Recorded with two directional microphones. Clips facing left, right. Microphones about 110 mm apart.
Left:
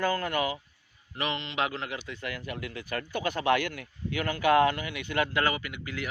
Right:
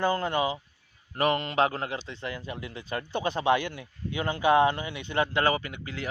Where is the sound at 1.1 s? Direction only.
45° right (ahead or behind).